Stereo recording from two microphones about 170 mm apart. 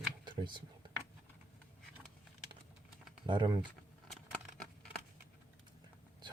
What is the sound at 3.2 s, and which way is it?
Speech, 25° right (ahead or behind).